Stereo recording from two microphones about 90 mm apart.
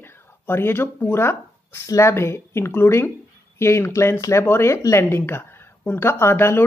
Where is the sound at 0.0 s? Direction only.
25° left (ahead or behind).